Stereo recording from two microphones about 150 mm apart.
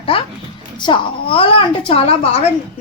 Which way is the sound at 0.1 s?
35° left (ahead or behind).